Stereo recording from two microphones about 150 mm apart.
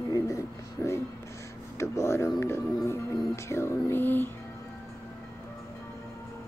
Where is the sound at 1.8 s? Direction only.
20° left (ahead or behind).